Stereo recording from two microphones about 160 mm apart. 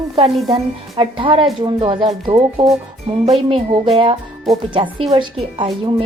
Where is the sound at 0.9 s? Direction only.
30° right (ahead or behind).